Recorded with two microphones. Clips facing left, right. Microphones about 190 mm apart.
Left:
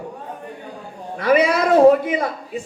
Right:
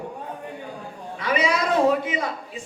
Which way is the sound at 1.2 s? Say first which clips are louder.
Left 7 dB; 55° left (ahead or behind).